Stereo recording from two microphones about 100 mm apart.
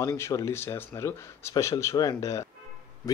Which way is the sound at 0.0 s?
30° left (ahead or behind).